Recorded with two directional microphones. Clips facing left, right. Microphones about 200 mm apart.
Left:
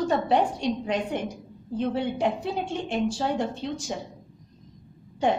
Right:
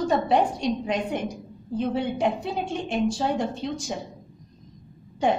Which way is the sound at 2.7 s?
15° right (ahead or behind).